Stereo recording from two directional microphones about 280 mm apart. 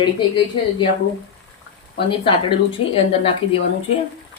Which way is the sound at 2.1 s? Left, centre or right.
Centre.